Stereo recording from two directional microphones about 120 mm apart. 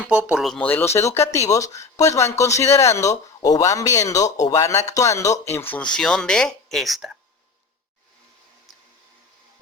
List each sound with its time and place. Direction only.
0.0 s speech: 10° right (ahead or behind)
0.6 s speech: 15° left (ahead or behind)
5.7 s speech: 5° left (ahead or behind)